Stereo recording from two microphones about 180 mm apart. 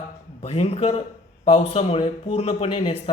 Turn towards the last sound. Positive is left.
turn(degrees=35)  # may be behind; listen again after turning